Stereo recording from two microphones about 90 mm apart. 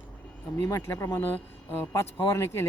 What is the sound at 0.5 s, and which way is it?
Speech, 35° left (ahead or behind).